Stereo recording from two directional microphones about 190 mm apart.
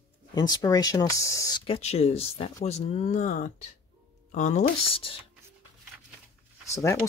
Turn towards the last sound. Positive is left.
turn(degrees=15)  # may be behind; listen again after turning